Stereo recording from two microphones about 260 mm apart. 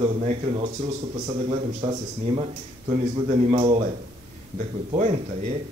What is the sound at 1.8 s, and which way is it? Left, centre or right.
Speech, centre.